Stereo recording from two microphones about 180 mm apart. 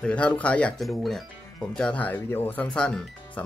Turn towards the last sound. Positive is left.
turn(degrees=5)  # may be behind; listen again after turning